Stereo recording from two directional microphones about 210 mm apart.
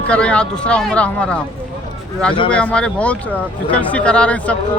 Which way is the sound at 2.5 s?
5° left (ahead or behind).